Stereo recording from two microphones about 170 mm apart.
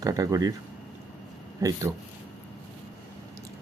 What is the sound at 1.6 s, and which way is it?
Speech, 20° right (ahead or behind).